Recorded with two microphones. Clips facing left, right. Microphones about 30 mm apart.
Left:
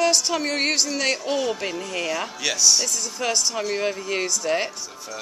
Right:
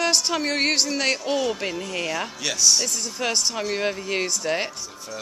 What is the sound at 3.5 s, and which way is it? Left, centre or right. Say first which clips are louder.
Speech: left 1 dB; centre.